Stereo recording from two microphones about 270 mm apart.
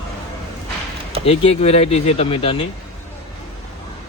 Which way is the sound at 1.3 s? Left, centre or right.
Left.